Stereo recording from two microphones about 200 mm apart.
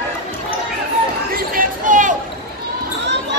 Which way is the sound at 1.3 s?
45° right (ahead or behind).